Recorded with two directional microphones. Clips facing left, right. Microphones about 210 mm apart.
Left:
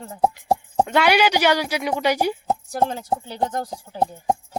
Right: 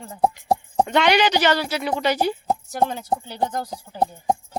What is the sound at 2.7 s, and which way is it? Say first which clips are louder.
Speech: even; centre (ahead or behind).